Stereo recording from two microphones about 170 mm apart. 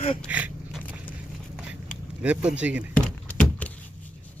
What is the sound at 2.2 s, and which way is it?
Speech, 10° right (ahead or behind).